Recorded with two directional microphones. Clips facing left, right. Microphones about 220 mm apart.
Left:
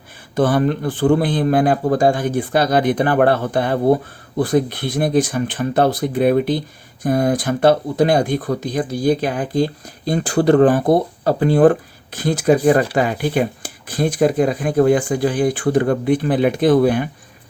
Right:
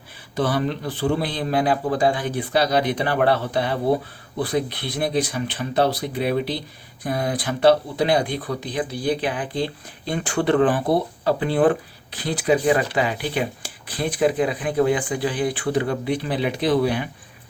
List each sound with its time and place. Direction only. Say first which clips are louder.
0.3 s speech: left 6 dB; 50° left (ahead or behind)